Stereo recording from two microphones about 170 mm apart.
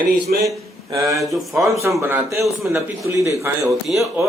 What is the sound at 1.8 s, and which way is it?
Speech, 15° right (ahead or behind).